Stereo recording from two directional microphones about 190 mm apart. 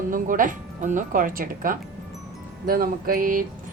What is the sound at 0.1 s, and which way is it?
Speech, 45° right (ahead or behind).